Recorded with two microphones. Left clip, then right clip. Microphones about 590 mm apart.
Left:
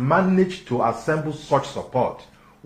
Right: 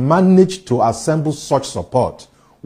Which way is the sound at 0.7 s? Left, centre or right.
Right.